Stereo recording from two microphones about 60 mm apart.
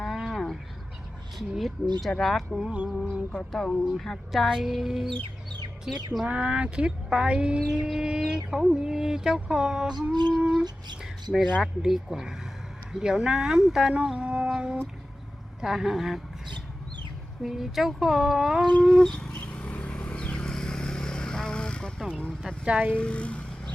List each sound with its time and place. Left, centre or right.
0.0 s a sound: centre
1.4 s speech: centre
2.6 s speech: centre
3.5 s a sound: centre
3.9 s speech: centre
6.2 s speech: right
7.9 s a sound: centre
8.4 s speech: centre
17.4 s speech: centre
18.8 s a sound: centre
19.3 s vehicle: left
22.6 s speech: right
23.0 s vehicle: centre